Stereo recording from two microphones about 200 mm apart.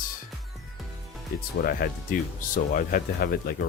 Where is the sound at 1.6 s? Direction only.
45° left (ahead or behind).